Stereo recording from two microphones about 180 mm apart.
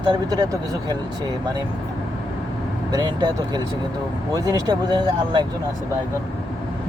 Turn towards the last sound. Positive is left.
turn(degrees=-25)  # may be behind; listen again after turning